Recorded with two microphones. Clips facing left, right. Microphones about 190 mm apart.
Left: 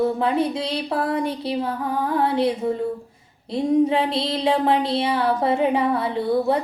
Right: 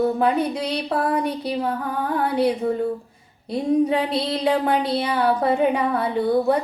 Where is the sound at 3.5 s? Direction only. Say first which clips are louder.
Left 1 dB; 25° left (ahead or behind).